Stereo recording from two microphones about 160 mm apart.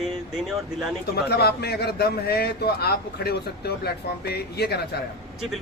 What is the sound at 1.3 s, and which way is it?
A man's voice, 85° left.